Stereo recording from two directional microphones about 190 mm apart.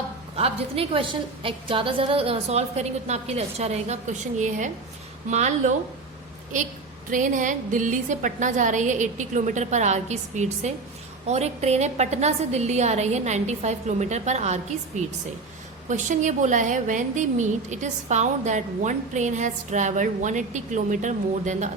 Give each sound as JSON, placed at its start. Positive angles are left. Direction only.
{"t": 0.3, "sound": "a woman's voice", "side_deg": -30}
{"t": 7.1, "sound": "a woman's voice", "side_deg": -45}
{"t": 15.9, "sound": "a woman's voice", "side_deg": -40}